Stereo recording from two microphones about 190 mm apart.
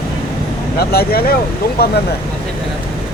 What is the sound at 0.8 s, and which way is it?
Speech, 55° left (ahead or behind).